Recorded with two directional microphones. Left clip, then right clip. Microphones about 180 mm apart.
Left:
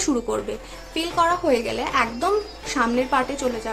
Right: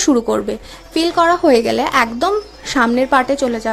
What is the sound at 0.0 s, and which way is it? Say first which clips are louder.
A woman's voice: right 9 dB; 35° right (ahead or behind).